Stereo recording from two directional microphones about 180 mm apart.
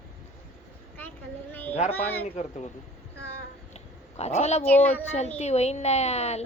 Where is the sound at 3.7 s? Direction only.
35° left (ahead or behind).